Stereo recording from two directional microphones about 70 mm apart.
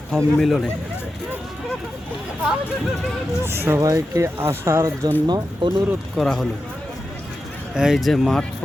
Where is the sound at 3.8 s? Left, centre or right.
Right.